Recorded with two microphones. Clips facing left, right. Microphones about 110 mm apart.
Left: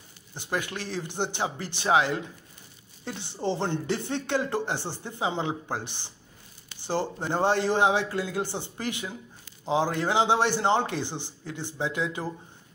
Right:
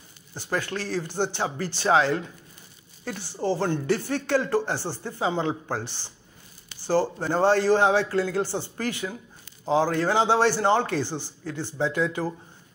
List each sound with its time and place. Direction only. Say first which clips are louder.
0.3 s a man's voice: right 2 dB; 15° left (ahead or behind)